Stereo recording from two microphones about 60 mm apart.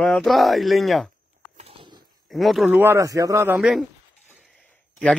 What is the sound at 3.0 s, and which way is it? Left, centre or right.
Speech, right.